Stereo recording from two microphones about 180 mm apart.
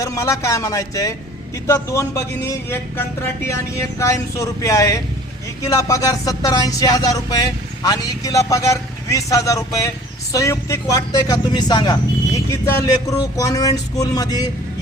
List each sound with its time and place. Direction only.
0.0 s a man's voice: 15° left (ahead or behind)